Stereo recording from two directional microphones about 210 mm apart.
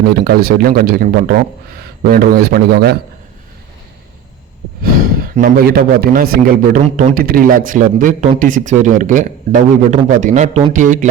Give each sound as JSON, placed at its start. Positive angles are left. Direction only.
{"t": 0.1, "sound": "speech", "side_deg": -45}
{"t": 4.8, "sound": "speech", "side_deg": -45}